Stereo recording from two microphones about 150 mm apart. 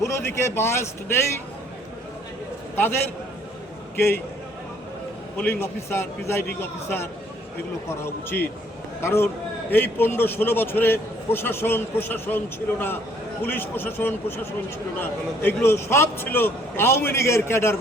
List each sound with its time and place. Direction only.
0.0 s a man's voice: 15° left (ahead or behind)
2.7 s a man's voice: 15° left (ahead or behind)
5.4 s a man's voice: 15° left (ahead or behind)